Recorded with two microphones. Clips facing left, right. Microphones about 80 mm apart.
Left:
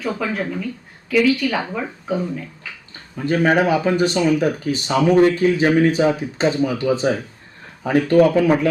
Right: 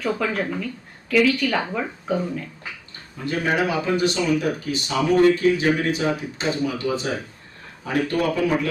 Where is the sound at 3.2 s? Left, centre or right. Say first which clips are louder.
Left 6 dB; left.